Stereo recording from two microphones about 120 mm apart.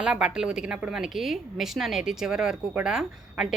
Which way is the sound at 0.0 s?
5° right (ahead or behind).